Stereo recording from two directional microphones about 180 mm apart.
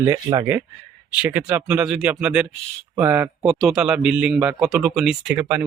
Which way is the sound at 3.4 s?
Centre (ahead or behind).